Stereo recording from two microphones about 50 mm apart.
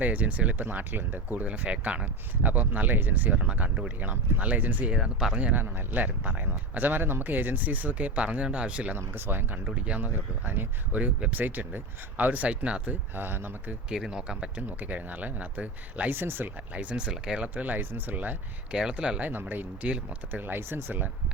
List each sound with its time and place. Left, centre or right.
0.0 s speech: right
4.9 s speech: centre
5.5 s speech: right
9.0 s speech: right
9.6 s speech: right
13.1 s speech: right
13.9 s speech: centre
14.8 s speech: right
16.1 s speech: right
16.7 s speech: right
17.4 s speech: right
18.7 s speech: centre
19.3 s speech: right